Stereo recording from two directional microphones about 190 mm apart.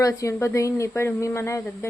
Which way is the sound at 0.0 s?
15° left (ahead or behind).